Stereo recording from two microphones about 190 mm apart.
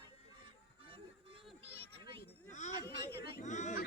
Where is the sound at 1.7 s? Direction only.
30° right (ahead or behind).